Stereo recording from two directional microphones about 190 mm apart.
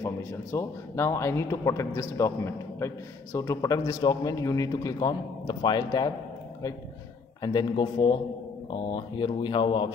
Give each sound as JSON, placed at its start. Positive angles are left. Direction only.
{"t": 0.0, "sound": "a man's voice", "side_deg": 15}
{"t": 7.4, "sound": "a man's voice", "side_deg": 25}